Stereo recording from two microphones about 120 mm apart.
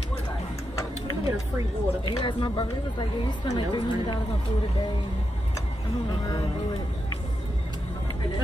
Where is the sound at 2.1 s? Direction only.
40° left (ahead or behind).